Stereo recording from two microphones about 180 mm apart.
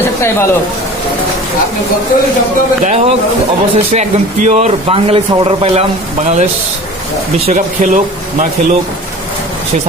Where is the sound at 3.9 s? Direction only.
40° right (ahead or behind).